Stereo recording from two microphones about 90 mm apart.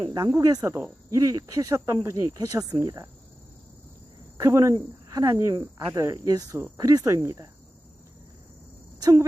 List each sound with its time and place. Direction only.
0.1 s speech: 40° right (ahead or behind)
4.4 s speech: 35° right (ahead or behind)
9.0 s a sound: 40° right (ahead or behind)